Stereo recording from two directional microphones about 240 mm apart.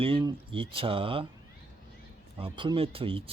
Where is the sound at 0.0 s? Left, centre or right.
Right.